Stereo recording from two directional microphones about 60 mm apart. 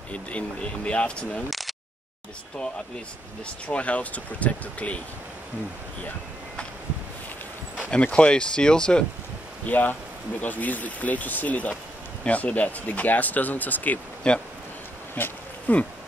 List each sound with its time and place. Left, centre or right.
0.1 s speech: left
1.5 s a sound: centre
3.6 s speech: left
7.9 s speech: left
9.7 s speech: left
14.2 s speech: centre
15.2 s speech: left